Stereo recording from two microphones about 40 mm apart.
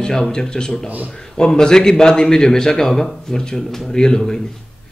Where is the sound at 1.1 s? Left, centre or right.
Centre.